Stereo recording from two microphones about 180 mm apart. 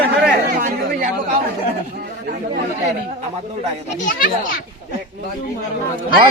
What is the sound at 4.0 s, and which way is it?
Speech, 50° left (ahead or behind).